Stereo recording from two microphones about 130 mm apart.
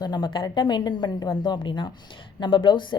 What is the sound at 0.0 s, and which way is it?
A woman's voice, 35° left (ahead or behind).